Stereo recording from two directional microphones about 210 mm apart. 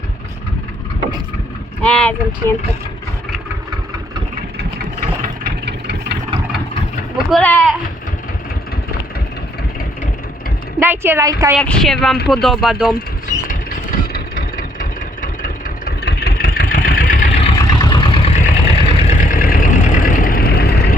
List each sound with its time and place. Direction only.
1.8 s speech: 5° left (ahead or behind)
7.3 s speech: 5° left (ahead or behind)
10.8 s a woman's voice: 10° right (ahead or behind)
11.5 s speech: 5° left (ahead or behind)
13.5 s vehicle: 45° left (ahead or behind)
17.7 s vehicle: 20° left (ahead or behind); by 20.9 s 50° left (ahead or behind)